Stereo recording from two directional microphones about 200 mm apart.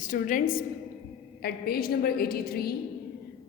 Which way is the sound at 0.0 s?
40° left (ahead or behind).